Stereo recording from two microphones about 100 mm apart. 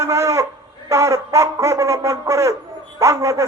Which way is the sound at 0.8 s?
30° right (ahead or behind).